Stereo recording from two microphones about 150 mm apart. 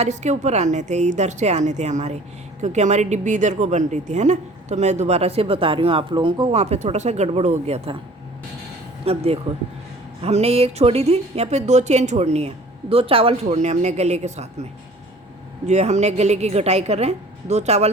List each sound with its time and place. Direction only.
0.0 s a woman's voice: 50° right (ahead or behind)
9.0 s a woman's voice: 40° right (ahead or behind)